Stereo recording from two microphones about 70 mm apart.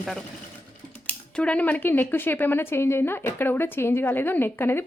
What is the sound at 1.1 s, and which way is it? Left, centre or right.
Speech, centre.